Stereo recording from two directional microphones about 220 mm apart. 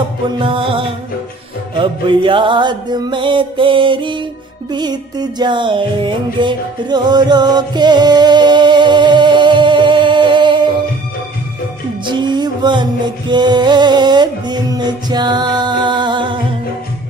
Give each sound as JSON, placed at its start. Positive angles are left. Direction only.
{"t": 0.4, "sound": "music", "side_deg": -25}
{"t": 12.0, "sound": "music", "side_deg": -20}